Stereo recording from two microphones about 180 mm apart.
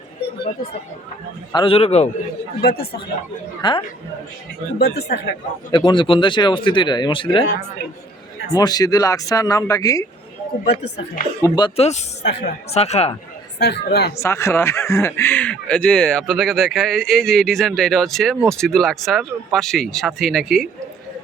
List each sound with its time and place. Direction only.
1.5 s a man's voice: 30° left (ahead or behind)
2.6 s speech: 60° left (ahead or behind)
3.6 s speech: 25° left (ahead or behind)
4.8 s speech: 65° left (ahead or behind)
5.7 s speech: 25° left (ahead or behind)
8.5 s speech: 20° left (ahead or behind)
11.4 s speech: 25° left (ahead or behind)
11.8 s a man's voice: 40° left (ahead or behind)
12.2 s speech: 70° left (ahead or behind)
12.7 s a man's voice: 35° left (ahead or behind)
13.6 s speech: 65° left (ahead or behind)
14.2 s speech: 15° left (ahead or behind)